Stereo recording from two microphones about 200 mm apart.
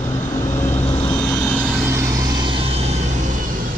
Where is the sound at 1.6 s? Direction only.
5° right (ahead or behind); by 3.4 s 35° right (ahead or behind).